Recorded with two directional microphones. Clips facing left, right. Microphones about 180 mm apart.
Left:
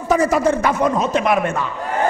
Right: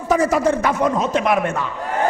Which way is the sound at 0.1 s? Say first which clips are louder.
Left 1 dB; 10° left (ahead or behind).